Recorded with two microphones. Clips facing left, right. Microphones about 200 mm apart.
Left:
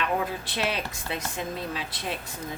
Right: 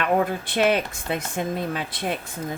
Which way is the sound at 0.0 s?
55° right (ahead or behind).